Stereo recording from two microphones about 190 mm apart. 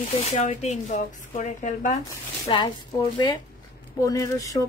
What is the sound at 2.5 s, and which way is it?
Speech, 25° left (ahead or behind).